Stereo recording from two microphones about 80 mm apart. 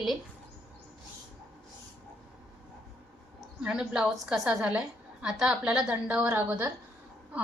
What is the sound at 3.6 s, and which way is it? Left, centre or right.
A woman's voice, centre.